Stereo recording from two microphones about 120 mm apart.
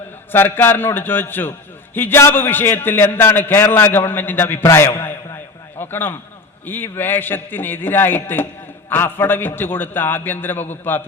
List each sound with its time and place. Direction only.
0.3 s a man's voice: 15° left (ahead or behind)